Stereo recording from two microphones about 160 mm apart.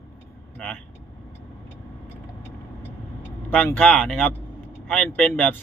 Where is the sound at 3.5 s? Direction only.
10° left (ahead or behind).